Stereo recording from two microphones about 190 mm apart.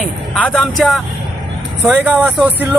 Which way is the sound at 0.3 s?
5° left (ahead or behind).